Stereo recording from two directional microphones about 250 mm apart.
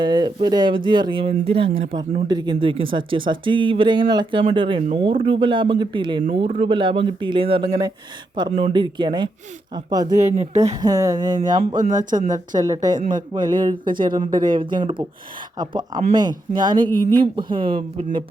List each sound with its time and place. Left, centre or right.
0.0 s speech: centre
10.2 s speech: right
10.8 s speech: centre